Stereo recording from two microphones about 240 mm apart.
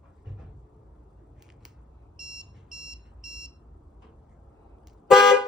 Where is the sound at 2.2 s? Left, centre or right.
Centre.